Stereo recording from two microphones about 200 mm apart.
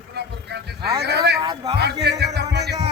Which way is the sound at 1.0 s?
55° right (ahead or behind).